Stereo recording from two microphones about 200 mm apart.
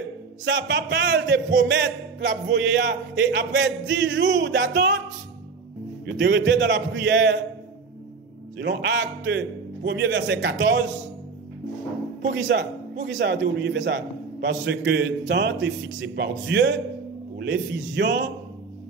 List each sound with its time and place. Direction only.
0.5 s a man's voice: 65° right (ahead or behind)
6.0 s a man's voice: 60° right (ahead or behind)
8.5 s a man's voice: 55° right (ahead or behind)
12.2 s a man's voice: 65° right (ahead or behind)